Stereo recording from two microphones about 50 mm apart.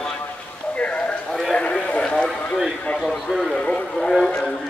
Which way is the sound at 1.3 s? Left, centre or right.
Centre.